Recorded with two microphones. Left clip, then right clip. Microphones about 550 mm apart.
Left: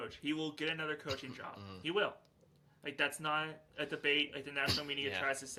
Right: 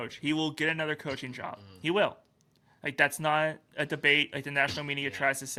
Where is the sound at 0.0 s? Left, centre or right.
Right.